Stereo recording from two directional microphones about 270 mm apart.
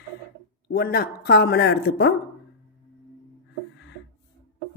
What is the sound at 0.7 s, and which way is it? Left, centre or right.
A woman's voice, left.